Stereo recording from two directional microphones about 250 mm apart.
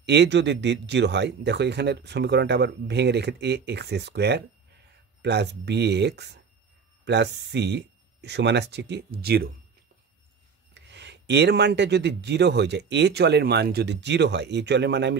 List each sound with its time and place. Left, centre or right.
0.0 s speech: right
10.7 s speech: right